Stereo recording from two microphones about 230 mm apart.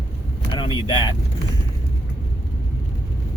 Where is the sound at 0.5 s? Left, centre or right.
Centre.